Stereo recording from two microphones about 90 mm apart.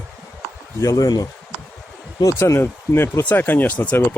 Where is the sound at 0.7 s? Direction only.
40° left (ahead or behind).